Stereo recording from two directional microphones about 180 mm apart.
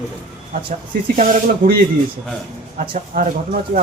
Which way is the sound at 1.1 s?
50° right (ahead or behind).